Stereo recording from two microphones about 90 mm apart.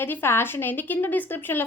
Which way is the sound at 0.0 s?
25° left (ahead or behind).